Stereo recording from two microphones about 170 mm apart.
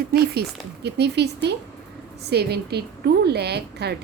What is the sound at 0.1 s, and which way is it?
A woman's voice, 70° right (ahead or behind).